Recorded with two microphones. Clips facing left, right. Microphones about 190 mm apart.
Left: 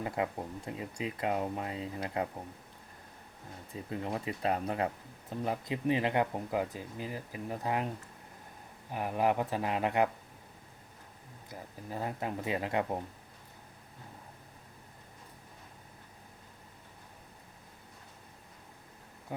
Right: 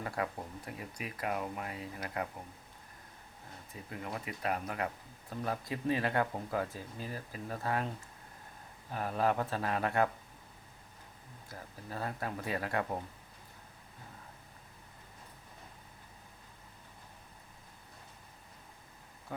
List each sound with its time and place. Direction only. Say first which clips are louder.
0.0 s speech: left 3 dB; 20° left (ahead or behind)
3.8 s speech: left 5 dB; 25° left (ahead or behind)
11.4 s speech: left 3 dB; 15° left (ahead or behind)